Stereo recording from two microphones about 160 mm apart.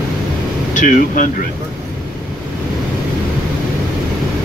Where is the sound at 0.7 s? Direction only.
55° left (ahead or behind).